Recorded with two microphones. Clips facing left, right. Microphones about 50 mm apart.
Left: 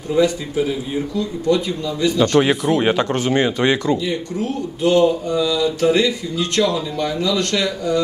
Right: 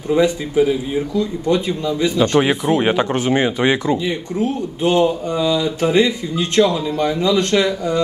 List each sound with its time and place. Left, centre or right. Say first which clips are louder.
0.1 s speech: right 2 dB; right
2.4 s speech: even; centre
4.0 s speech: right 2 dB; right